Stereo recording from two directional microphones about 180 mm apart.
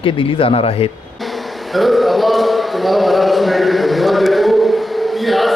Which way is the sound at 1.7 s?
Centre (ahead or behind).